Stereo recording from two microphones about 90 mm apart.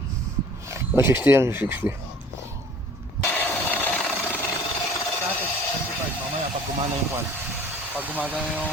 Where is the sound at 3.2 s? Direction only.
20° left (ahead or behind).